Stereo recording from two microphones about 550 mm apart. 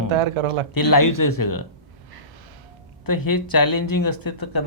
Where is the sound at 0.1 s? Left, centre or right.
Right.